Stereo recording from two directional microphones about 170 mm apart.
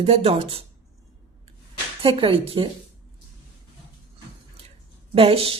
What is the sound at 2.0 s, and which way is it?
Speech, 30° right (ahead or behind).